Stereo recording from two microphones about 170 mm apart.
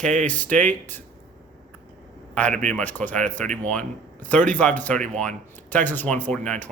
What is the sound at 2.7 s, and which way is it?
Speech, 10° left (ahead or behind).